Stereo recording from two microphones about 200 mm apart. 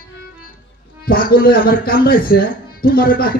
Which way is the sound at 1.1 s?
45° left (ahead or behind).